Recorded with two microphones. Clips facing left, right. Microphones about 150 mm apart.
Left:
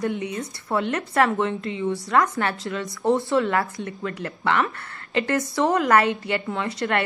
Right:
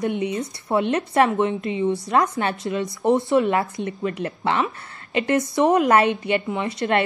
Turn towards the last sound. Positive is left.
turn(degrees=-20)  # may be behind; listen again after turning